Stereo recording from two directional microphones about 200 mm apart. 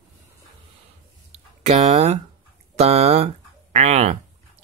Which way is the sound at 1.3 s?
30° right (ahead or behind).